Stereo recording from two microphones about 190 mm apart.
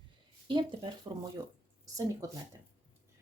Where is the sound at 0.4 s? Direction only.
25° right (ahead or behind).